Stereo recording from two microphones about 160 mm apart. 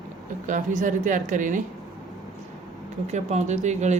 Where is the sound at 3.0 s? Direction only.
45° right (ahead or behind).